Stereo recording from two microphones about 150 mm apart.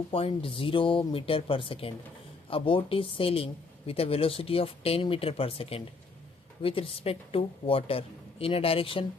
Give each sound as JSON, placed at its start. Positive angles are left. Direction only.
{"t": 0.1, "sound": "speech", "side_deg": 40}